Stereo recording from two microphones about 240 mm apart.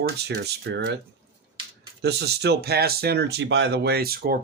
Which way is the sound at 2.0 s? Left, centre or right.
Right.